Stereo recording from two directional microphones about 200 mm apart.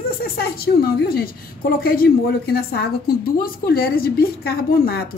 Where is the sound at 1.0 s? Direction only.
50° left (ahead or behind).